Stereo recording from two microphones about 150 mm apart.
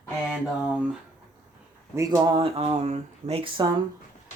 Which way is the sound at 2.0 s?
25° right (ahead or behind).